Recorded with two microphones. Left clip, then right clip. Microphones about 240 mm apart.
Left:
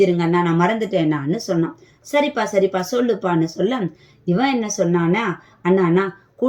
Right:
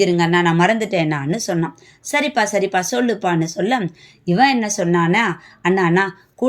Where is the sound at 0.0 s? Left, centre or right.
Right.